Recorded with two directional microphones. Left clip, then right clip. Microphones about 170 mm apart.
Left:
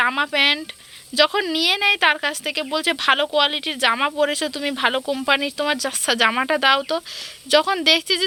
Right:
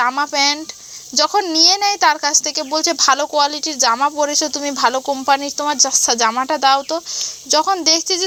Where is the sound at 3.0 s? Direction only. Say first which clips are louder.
Right 2 dB; 5° left (ahead or behind).